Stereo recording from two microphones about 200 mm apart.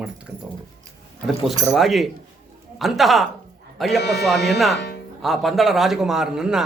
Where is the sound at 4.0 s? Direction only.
55° left (ahead or behind).